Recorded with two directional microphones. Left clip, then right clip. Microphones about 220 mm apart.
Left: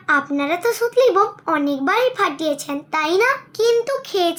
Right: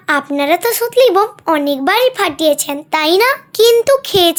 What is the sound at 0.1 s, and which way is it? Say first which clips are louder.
Speech: right 5 dB; 45° right (ahead or behind).